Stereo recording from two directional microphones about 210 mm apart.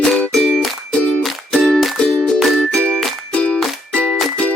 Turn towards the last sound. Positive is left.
turn(degrees=5)  # may be behind; listen again after turning